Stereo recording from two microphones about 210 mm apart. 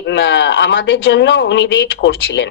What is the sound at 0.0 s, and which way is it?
Speech, 60° left (ahead or behind).